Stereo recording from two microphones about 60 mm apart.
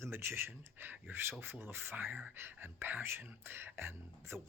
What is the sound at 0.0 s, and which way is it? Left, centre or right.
Speech, right.